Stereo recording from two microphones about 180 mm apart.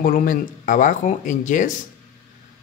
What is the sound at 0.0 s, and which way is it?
A man's voice, 50° left (ahead or behind).